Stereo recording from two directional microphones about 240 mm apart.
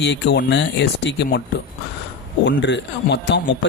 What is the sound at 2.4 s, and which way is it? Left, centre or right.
Speech, left.